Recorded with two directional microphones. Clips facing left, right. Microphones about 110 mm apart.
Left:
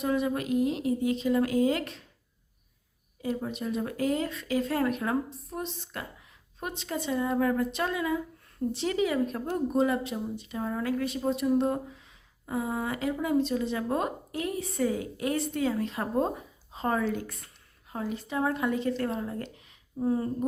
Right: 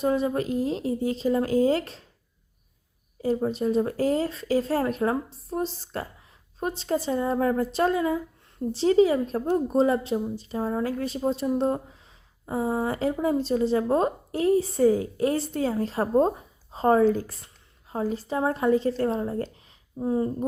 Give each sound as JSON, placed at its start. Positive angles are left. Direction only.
{"t": 0.0, "sound": "speech", "side_deg": -30}
{"t": 3.2, "sound": "speech", "side_deg": -35}